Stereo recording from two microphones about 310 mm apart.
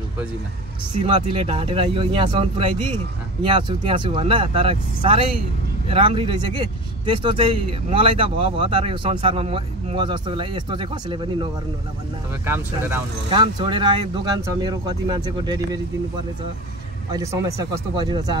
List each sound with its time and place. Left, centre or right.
1.0 s speech: centre
12.4 s speech: centre
17.1 s speech: centre